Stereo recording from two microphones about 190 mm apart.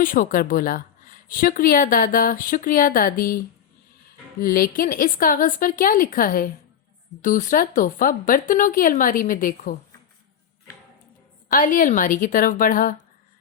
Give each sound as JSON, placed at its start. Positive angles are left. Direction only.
{"t": 0.0, "sound": "speech", "side_deg": 45}
{"t": 11.4, "sound": "speech", "side_deg": 45}